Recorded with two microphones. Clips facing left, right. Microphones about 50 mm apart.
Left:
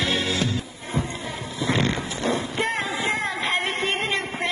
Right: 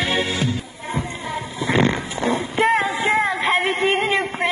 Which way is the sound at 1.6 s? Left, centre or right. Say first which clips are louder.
Right 4 dB; centre.